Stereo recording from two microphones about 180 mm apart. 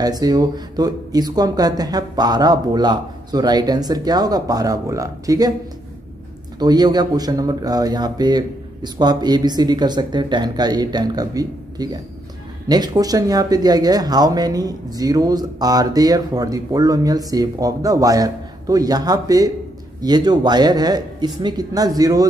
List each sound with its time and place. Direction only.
0.0 s speech: 20° right (ahead or behind)
6.6 s speech: 20° right (ahead or behind)